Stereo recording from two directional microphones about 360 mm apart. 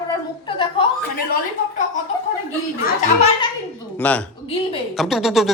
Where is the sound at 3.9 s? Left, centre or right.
Centre.